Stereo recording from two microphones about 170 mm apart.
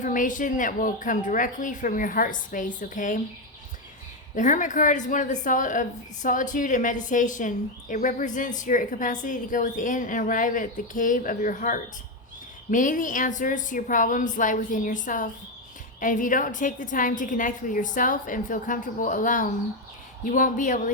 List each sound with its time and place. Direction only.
0.0 s a woman's voice: 50° left (ahead or behind)
4.4 s a woman's voice: 50° left (ahead or behind)